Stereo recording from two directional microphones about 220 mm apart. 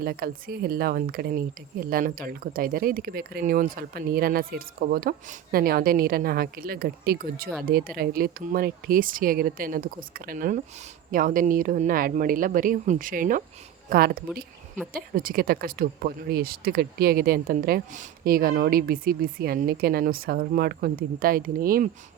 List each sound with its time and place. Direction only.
0.0 s speech: 40° right (ahead or behind)